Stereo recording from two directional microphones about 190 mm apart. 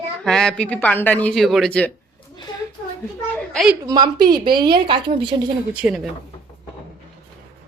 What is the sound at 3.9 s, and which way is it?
A woman's voice, 25° right (ahead or behind).